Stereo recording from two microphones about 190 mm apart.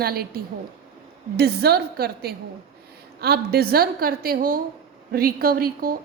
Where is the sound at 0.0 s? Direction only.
55° right (ahead or behind).